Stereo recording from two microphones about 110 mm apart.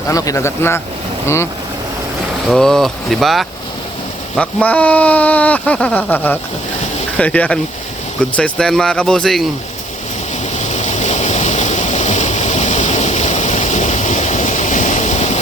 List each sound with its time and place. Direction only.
0.1 s speech: 30° left (ahead or behind)
2.5 s speech: 5° left (ahead or behind)
4.4 s speech: 15° left (ahead or behind)
10.6 s stream: 90° left